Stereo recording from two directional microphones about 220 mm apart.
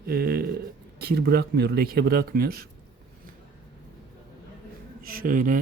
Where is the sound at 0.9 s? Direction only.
45° right (ahead or behind).